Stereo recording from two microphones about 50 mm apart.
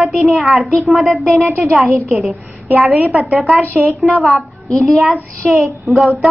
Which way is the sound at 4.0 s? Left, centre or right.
Centre.